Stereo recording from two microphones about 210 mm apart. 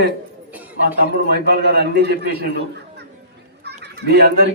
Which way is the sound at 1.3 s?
50° right (ahead or behind).